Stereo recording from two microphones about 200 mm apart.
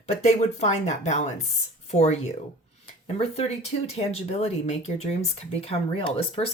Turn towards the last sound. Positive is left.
turn(degrees=30)  # may be behind; listen again after turning